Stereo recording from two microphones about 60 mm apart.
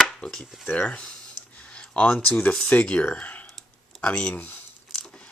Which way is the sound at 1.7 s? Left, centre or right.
Centre.